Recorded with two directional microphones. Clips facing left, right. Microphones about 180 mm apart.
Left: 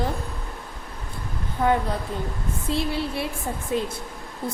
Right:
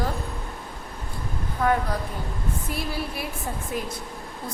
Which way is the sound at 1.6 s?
25° left (ahead or behind).